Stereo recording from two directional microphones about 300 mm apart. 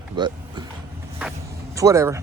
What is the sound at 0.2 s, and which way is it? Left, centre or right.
Speech, centre.